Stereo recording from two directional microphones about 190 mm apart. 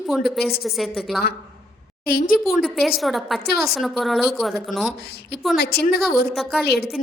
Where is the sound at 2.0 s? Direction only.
50° left (ahead or behind).